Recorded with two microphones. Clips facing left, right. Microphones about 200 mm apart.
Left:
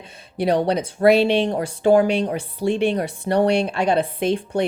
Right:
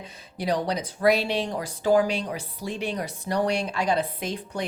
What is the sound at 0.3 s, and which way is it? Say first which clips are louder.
Speech: left 7 dB; 60° left (ahead or behind).